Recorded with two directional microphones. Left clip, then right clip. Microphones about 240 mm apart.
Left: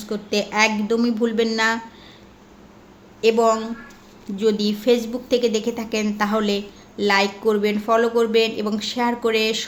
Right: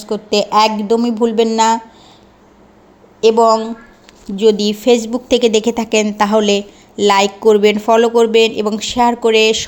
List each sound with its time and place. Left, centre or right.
0.1 s a woman's voice: right
3.2 s a woman's voice: right